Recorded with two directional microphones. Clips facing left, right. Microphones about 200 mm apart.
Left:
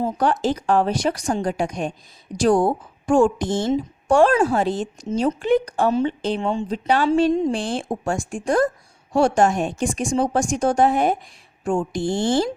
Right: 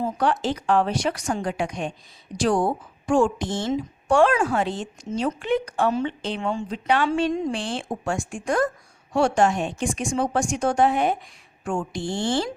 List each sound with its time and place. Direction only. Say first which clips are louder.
0.2 s a woman's voice: left 3 dB; 40° left (ahead or behind)
6.4 s speech: even; 25° left (ahead or behind)
6.7 s a woman's voice: left 3 dB; 35° left (ahead or behind)
11.6 s speech: left 5 dB; 30° left (ahead or behind)
11.9 s a woman's voice: left 4 dB; 45° left (ahead or behind)